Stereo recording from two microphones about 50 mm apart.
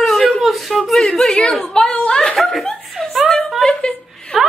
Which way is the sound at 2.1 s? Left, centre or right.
Centre.